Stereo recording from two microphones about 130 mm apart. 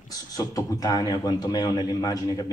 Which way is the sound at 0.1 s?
25° left (ahead or behind).